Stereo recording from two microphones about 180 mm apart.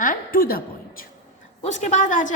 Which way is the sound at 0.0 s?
50° left (ahead or behind).